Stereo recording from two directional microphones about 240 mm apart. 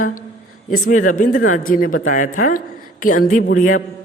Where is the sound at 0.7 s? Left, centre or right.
Left.